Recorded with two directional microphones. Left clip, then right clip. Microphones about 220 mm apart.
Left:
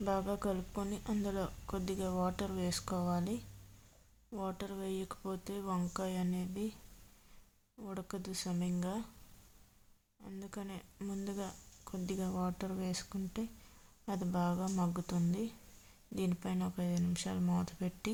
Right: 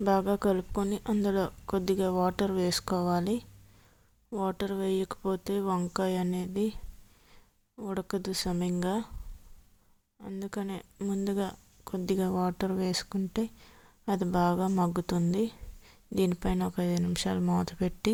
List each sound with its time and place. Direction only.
0.0 s a woman's voice: 30° right (ahead or behind)
7.8 s a woman's voice: 30° right (ahead or behind)
10.2 s a woman's voice: 25° right (ahead or behind)